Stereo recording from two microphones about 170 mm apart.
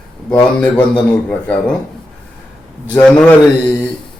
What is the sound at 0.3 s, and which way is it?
Speech, 10° left (ahead or behind).